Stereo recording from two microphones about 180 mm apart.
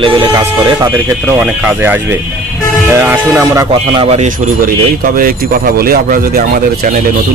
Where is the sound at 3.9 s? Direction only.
30° right (ahead or behind).